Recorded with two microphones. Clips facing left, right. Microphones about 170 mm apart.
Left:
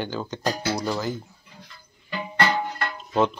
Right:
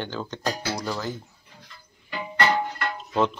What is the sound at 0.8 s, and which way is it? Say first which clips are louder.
Speech: left 3 dB; 15° left (ahead or behind).